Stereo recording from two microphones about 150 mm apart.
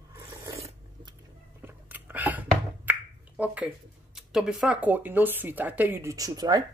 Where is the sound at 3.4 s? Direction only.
10° right (ahead or behind).